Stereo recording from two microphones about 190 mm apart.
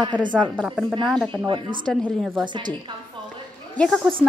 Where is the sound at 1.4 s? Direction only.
25° right (ahead or behind).